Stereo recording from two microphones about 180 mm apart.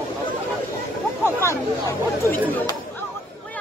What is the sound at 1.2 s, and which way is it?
Chatter, 15° left (ahead or behind).